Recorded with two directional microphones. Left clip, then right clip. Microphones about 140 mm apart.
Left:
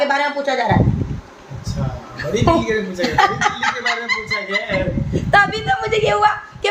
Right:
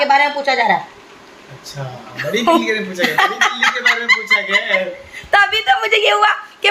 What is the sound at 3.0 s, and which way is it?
A woman's voice, 25° right (ahead or behind).